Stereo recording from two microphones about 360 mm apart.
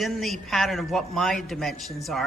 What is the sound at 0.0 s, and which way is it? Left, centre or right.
Speech, centre.